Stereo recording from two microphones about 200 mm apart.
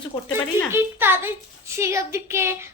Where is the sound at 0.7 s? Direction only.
10° right (ahead or behind).